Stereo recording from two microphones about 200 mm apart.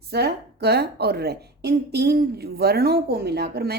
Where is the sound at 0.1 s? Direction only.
55° right (ahead or behind).